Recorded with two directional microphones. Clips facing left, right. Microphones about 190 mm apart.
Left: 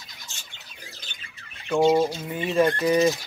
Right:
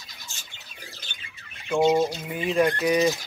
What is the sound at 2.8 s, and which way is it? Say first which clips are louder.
Speech: left 2 dB; 15° right (ahead or behind).